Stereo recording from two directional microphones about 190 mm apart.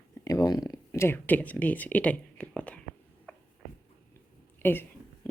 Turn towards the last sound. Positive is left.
turn(degrees=10)  # may be behind; listen again after turning